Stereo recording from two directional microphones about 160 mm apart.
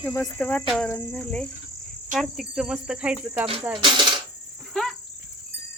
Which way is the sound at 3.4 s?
35° right (ahead or behind).